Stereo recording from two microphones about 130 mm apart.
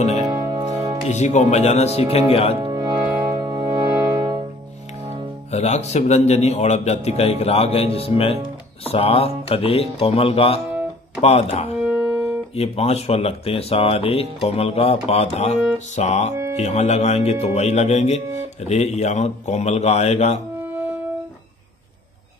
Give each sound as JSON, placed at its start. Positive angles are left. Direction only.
{"t": 0.2, "sound": "music", "side_deg": -30}
{"t": 1.0, "sound": "speech", "side_deg": 60}
{"t": 2.6, "sound": "music", "side_deg": -30}
{"t": 3.9, "sound": "music", "side_deg": -20}
{"t": 5.5, "sound": "speech", "side_deg": 55}
{"t": 11.8, "sound": "music", "side_deg": -5}
{"t": 12.5, "sound": "speech", "side_deg": 55}